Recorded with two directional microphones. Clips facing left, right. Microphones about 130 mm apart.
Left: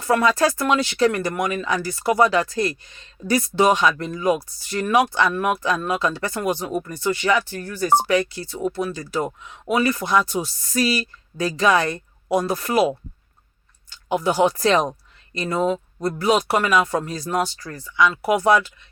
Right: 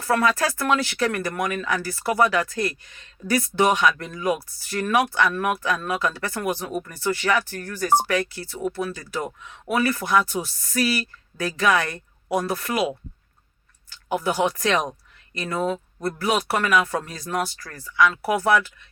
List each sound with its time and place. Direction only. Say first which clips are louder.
0.0 s speech: left 3 dB; 20° left (ahead or behind)
13.9 s speech: left 3 dB; 20° left (ahead or behind)